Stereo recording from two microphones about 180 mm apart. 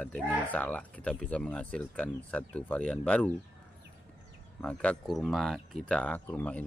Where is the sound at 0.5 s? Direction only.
10° left (ahead or behind).